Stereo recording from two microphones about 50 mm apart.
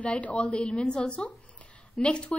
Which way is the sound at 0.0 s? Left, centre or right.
Left.